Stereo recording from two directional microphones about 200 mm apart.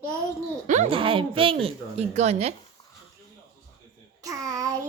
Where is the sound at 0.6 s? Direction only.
35° right (ahead or behind).